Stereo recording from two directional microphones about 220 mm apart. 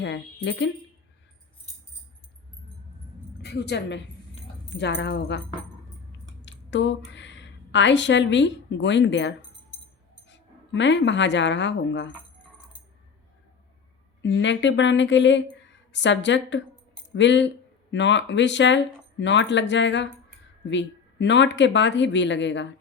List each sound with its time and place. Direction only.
0.4 s speech: 45° left (ahead or behind)
3.4 s a woman's voice: 50° left (ahead or behind)
6.1 s a sound: 55° left (ahead or behind)
10.2 s speech: 55° left (ahead or behind)
14.2 s speech: 55° left (ahead or behind)